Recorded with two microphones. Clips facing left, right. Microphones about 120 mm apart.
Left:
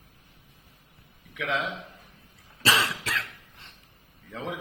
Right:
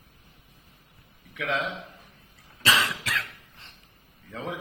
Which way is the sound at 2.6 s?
30° left (ahead or behind).